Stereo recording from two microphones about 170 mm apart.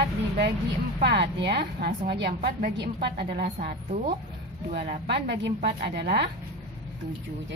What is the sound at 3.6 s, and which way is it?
Speech, 55° right (ahead or behind).